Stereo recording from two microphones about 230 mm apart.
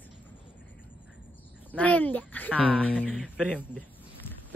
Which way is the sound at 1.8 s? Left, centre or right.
Centre.